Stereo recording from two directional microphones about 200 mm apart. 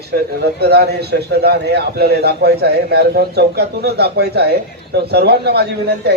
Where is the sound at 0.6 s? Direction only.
55° right (ahead or behind).